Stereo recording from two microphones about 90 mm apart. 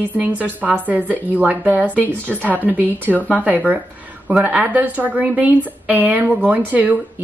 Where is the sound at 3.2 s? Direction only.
15° right (ahead or behind).